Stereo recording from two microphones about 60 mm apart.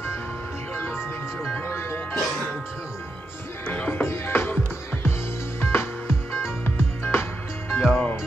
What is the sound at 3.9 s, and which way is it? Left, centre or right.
Music, left.